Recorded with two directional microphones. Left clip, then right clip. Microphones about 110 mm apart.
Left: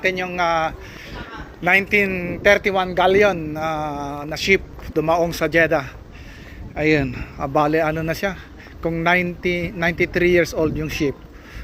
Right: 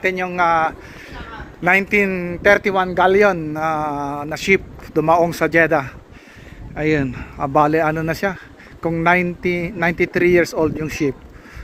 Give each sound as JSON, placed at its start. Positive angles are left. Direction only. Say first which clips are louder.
{"t": 0.0, "sound": "mantra", "louder": "right 2 dB", "side_deg": -60}
{"t": 1.6, "sound": "a man's voice", "louder": "right 1 dB", "side_deg": -45}
{"t": 3.5, "sound": "mantra", "louder": "right 3 dB", "side_deg": -65}
{"t": 7.0, "sound": "a man's voice", "louder": "right 2 dB", "side_deg": -50}